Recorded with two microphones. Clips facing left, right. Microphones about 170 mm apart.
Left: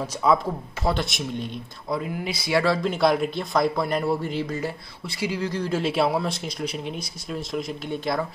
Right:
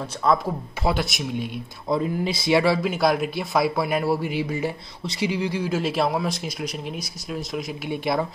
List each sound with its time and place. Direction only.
0.0 s speech: 10° left (ahead or behind)
0.8 s speech: 5° right (ahead or behind)
1.9 s speech: 25° right (ahead or behind)
2.6 s speech: 10° right (ahead or behind)